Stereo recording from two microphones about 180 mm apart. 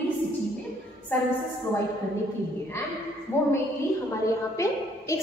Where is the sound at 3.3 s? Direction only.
15° left (ahead or behind).